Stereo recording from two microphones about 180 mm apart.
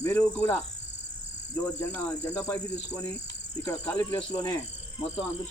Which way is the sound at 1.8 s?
10° left (ahead or behind).